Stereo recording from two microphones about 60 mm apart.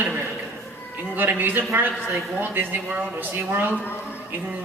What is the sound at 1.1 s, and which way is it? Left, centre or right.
Speech, right.